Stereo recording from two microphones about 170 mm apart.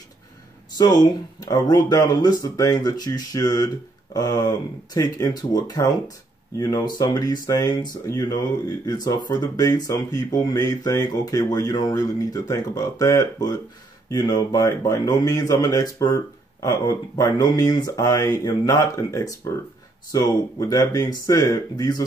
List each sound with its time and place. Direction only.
0.7 s speech: 25° left (ahead or behind)